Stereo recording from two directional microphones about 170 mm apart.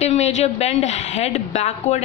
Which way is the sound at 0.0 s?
40° left (ahead or behind).